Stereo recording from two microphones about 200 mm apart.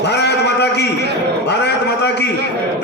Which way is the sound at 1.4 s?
55° left (ahead or behind).